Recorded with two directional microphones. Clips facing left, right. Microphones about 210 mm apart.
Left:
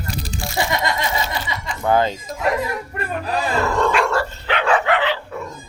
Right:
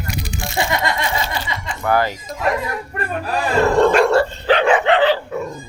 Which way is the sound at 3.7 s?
40° right (ahead or behind).